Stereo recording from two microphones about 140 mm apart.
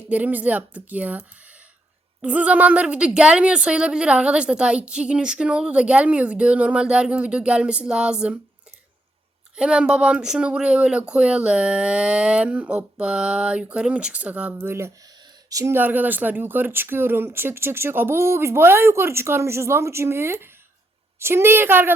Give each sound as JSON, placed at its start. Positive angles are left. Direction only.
{"t": 0.1, "sound": "speech", "side_deg": -10}
{"t": 2.2, "sound": "speech", "side_deg": -10}
{"t": 9.6, "sound": "speech", "side_deg": -5}